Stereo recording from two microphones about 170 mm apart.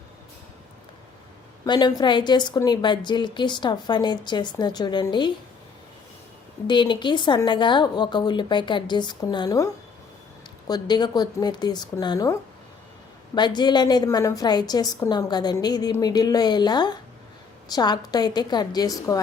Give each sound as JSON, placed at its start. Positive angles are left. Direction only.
{"t": 1.6, "sound": "a woman's voice", "side_deg": 25}
{"t": 6.7, "sound": "a woman's voice", "side_deg": 25}
{"t": 10.7, "sound": "a woman's voice", "side_deg": 25}